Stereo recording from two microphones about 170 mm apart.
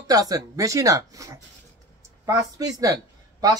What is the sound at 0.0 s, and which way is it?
A man's voice, 20° right (ahead or behind).